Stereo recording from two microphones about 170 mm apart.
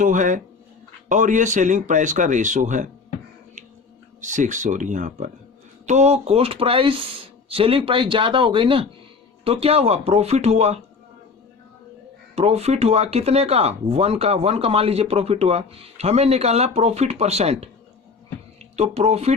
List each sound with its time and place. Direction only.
0.0 s speech: 50° right (ahead or behind)
4.2 s speech: 45° right (ahead or behind)
12.4 s speech: 40° right (ahead or behind)